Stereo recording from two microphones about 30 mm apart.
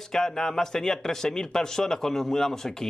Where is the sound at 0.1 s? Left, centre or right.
Centre.